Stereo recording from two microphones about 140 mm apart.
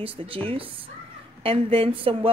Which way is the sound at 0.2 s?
40° right (ahead or behind).